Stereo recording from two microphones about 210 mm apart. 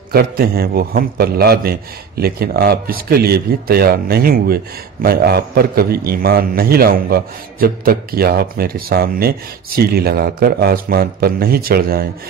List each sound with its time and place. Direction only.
0.1 s a man's voice: 45° right (ahead or behind)